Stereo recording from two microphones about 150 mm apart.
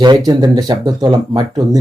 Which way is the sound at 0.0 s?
25° right (ahead or behind).